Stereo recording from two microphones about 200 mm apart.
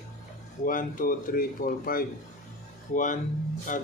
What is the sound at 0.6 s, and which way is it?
Speech, 40° left (ahead or behind).